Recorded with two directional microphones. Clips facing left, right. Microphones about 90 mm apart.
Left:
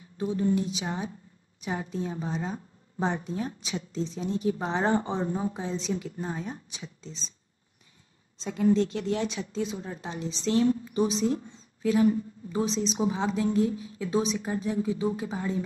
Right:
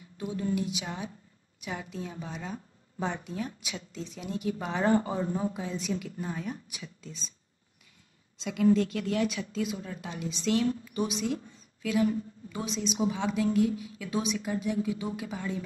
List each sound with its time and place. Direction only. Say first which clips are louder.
0.2 s a woman's voice: left 5 dB; 30° left (ahead or behind)
8.4 s a woman's voice: left 1 dB; 35° left (ahead or behind)